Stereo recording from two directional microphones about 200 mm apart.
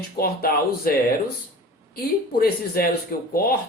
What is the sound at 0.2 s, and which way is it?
Speech, 50° left (ahead or behind).